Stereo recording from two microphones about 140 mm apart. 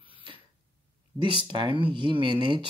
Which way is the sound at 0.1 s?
40° right (ahead or behind).